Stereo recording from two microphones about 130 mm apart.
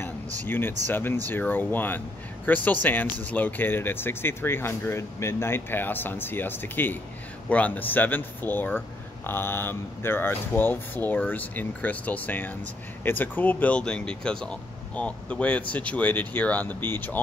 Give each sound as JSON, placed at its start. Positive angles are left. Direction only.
{"t": 0.5, "sound": "speech", "side_deg": 15}